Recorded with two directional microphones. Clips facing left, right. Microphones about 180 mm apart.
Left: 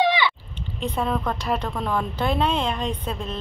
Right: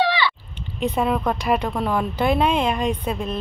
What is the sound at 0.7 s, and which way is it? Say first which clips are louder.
A woman's voice: right 4 dB; 10° right (ahead or behind).